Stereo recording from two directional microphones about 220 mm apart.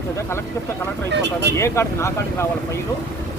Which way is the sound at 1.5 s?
10° left (ahead or behind).